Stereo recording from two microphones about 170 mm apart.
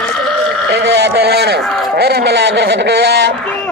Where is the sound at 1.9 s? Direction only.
70° right (ahead or behind).